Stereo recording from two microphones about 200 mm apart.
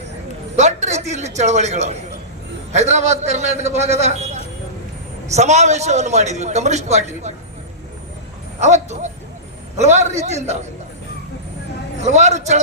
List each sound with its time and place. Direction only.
0.5 s a sound: 35° right (ahead or behind)
1.4 s a man's voice: 35° right (ahead or behind)
8.6 s a man's voice: 35° right (ahead or behind)
11.9 s a man's voice: 35° right (ahead or behind)